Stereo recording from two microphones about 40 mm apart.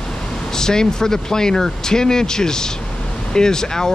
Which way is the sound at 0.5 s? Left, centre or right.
Centre.